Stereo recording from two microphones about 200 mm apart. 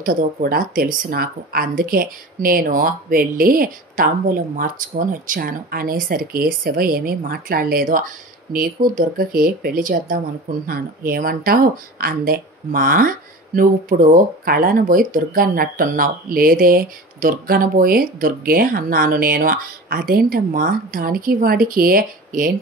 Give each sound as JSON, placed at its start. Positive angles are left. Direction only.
{"t": 0.0, "sound": "speech", "side_deg": -45}